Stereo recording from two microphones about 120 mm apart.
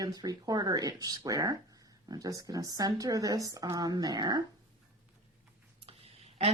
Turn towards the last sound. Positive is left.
turn(degrees=-55)  # may be behind; listen again after turning